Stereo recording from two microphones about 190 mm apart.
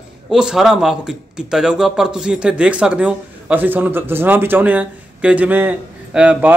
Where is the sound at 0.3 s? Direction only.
Centre (ahead or behind).